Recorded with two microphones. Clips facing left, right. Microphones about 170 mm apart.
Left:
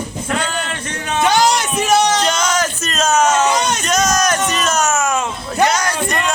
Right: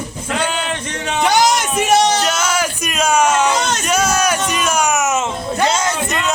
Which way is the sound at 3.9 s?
10° right (ahead or behind).